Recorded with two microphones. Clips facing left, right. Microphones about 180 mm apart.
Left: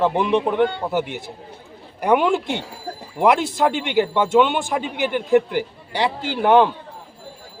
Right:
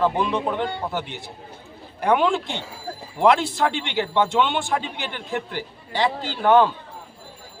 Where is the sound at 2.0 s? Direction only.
15° left (ahead or behind).